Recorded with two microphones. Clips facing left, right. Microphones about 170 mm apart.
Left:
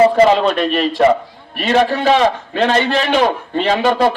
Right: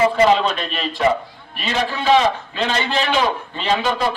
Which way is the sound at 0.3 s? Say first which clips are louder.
Left 7 dB; 65° left (ahead or behind).